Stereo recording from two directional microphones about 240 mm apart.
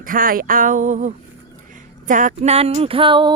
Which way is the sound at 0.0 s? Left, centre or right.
Right.